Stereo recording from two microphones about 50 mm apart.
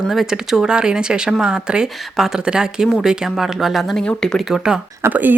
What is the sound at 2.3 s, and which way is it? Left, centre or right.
Speech, centre.